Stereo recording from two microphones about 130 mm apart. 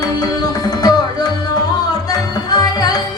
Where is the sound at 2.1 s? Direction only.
30° left (ahead or behind).